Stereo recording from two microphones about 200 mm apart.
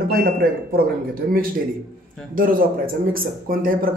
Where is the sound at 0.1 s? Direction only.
45° right (ahead or behind).